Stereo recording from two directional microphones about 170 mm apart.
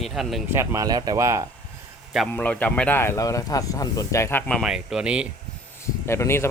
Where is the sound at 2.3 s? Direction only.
10° left (ahead or behind).